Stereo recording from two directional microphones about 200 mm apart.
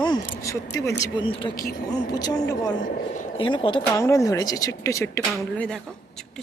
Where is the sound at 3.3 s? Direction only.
25° left (ahead or behind).